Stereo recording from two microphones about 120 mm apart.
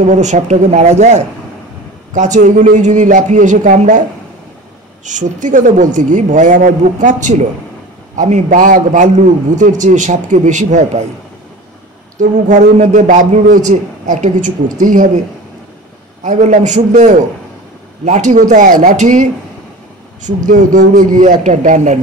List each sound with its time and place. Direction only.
0.0 s speech: 85° right
2.1 s a man's voice: 90° right
5.0 s a man's voice: 90° right
12.2 s a man's voice: 90° right
16.3 s a man's voice: 90° right
20.2 s a man's voice: 90° right